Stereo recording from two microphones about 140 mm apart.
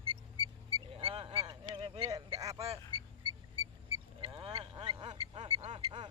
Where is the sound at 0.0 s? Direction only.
40° right (ahead or behind).